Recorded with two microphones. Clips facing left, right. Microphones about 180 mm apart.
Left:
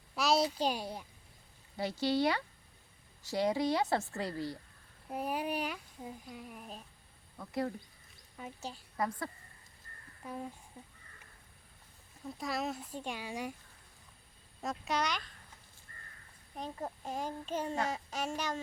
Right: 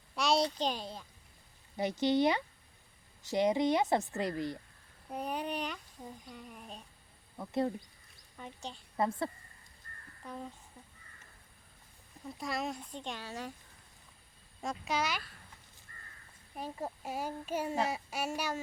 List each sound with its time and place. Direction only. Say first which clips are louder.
0.1 s a child's voice: even; 5° left (ahead or behind)
1.7 s speech: right 3 dB; 20° right (ahead or behind)
5.0 s a child's voice: left 1 dB; 5° left (ahead or behind)
7.3 s speech: right 3 dB; 25° right (ahead or behind)
8.4 s a child's voice: left 1 dB; 5° left (ahead or behind)
9.0 s speech: right 4 dB; 25° right (ahead or behind)
10.2 s speech: left 2 dB; 10° left (ahead or behind)
12.2 s a child's voice: even; centre (ahead or behind)
14.6 s a child's voice: even; centre (ahead or behind)
16.6 s speech: right 1 dB; 10° right (ahead or behind)